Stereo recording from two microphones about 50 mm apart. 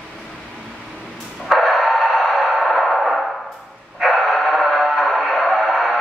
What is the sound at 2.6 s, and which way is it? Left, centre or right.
Music, centre.